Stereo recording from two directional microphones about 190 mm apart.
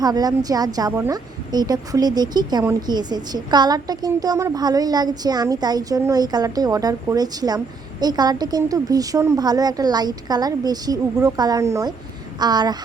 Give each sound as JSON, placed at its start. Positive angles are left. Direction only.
{"t": 0.0, "sound": "speech", "side_deg": -20}